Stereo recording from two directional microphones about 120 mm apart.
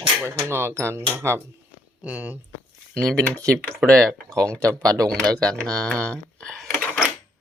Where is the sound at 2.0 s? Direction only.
10° right (ahead or behind).